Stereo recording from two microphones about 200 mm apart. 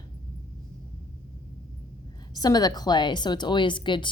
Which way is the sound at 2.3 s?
20° left (ahead or behind).